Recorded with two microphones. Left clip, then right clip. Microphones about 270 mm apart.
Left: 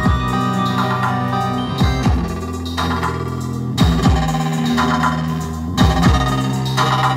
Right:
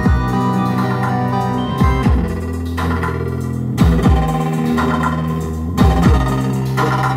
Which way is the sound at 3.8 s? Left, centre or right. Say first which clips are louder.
Right 1 dB; centre.